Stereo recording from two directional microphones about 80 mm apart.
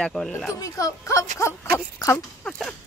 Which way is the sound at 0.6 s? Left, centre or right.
Left.